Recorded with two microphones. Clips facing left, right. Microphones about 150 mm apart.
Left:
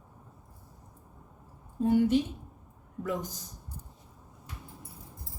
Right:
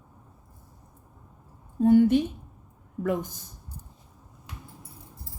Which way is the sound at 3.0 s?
55° right (ahead or behind).